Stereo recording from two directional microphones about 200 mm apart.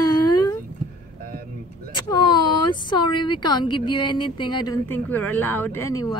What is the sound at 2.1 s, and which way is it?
Speech, 20° left (ahead or behind).